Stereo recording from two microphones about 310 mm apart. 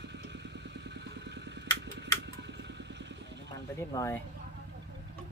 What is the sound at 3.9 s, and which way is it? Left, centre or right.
Speech, centre.